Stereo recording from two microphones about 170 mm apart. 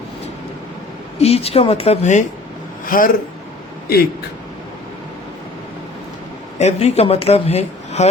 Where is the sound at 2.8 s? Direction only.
55° left (ahead or behind).